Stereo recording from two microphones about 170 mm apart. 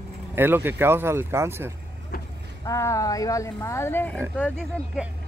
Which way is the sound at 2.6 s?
20° left (ahead or behind).